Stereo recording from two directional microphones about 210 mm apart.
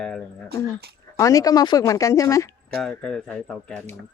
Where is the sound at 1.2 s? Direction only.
15° left (ahead or behind).